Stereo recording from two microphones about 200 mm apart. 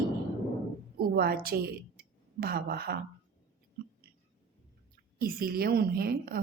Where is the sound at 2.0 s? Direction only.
50° right (ahead or behind).